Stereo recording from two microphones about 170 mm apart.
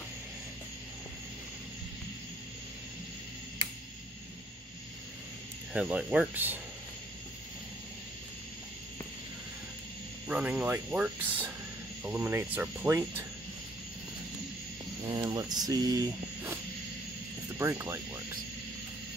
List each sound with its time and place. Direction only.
5.7 s speech: 5° right (ahead or behind)
10.2 s speech: 10° right (ahead or behind)
15.0 s speech: 25° right (ahead or behind)
17.6 s speech: 15° right (ahead or behind)